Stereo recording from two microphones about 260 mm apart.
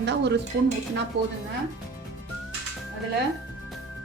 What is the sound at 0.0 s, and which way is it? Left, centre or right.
A woman's voice, right.